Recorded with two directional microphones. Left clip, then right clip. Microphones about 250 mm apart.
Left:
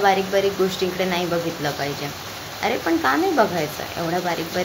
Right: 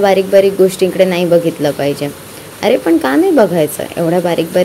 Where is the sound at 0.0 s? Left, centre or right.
Right.